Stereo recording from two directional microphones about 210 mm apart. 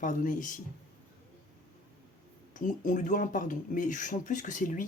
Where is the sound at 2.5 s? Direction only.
35° left (ahead or behind).